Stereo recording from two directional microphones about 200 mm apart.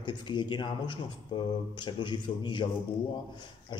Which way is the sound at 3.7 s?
25° left (ahead or behind).